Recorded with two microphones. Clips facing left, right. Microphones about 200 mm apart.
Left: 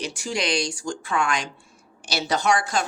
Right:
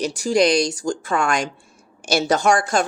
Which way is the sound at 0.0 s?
40° right (ahead or behind).